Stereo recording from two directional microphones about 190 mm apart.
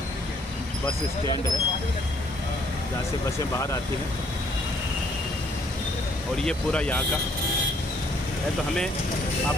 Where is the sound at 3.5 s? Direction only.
15° left (ahead or behind).